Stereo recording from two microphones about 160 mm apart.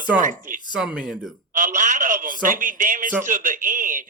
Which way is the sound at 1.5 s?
55° right (ahead or behind).